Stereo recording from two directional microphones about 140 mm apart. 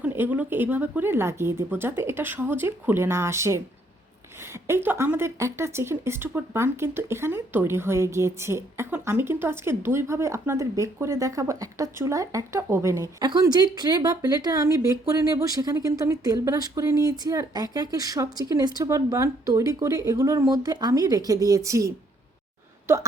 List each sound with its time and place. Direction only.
0.0 s speech: 15° right (ahead or behind)
4.6 s speech: 15° right (ahead or behind)